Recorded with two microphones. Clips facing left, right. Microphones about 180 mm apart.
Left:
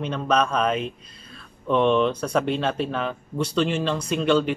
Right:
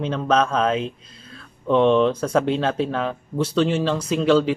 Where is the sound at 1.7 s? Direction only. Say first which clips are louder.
Right 3 dB; 5° left (ahead or behind).